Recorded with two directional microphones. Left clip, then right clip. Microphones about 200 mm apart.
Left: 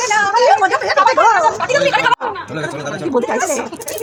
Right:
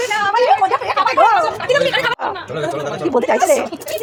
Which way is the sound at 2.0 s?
35° right (ahead or behind).